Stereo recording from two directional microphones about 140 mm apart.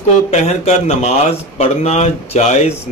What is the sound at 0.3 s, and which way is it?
A man's voice, 50° left (ahead or behind).